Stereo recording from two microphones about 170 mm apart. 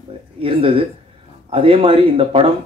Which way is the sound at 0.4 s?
35° right (ahead or behind).